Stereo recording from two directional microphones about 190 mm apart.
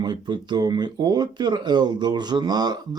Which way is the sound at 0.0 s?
25° right (ahead or behind).